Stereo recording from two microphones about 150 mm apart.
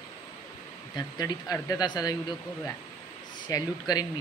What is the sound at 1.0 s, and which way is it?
Speech, 25° left (ahead or behind).